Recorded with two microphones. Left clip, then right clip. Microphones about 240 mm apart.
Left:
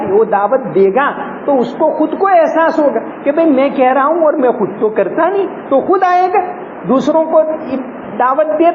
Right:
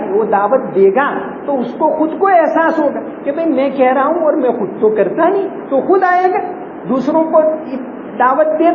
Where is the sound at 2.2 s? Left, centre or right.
Left.